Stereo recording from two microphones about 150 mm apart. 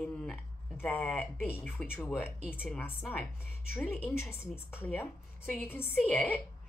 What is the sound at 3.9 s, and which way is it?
Speech, 15° left (ahead or behind).